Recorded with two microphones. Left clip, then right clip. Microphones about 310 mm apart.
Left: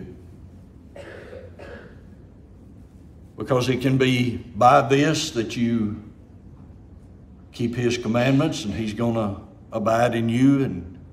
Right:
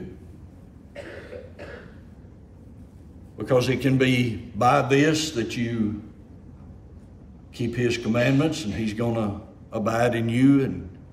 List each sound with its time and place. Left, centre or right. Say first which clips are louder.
3.3 s a man's voice: even; centre
7.5 s a man's voice: left 1 dB; centre